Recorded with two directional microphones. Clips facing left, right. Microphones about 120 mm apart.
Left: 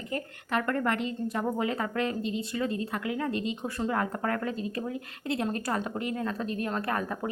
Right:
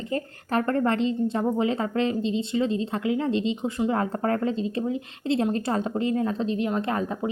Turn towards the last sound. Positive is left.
turn(degrees=-20)  # may be behind; listen again after turning